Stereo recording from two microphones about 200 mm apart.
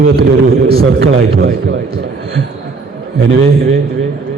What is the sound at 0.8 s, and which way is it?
Speech, 65° right (ahead or behind).